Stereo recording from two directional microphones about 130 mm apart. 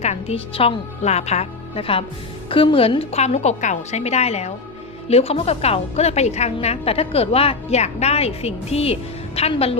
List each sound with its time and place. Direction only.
0.0 s a woman's voice: 55° left (ahead or behind)